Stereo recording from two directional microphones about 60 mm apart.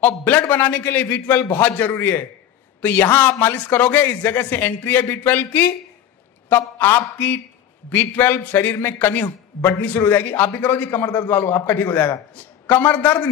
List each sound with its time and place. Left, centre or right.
0.0 s a man's voice: left